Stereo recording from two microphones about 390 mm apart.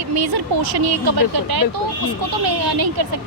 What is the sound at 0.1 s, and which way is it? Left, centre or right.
Speech, right.